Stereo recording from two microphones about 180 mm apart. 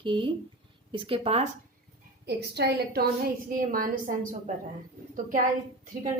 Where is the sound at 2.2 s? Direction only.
65° right (ahead or behind); by 4.5 s 45° right (ahead or behind).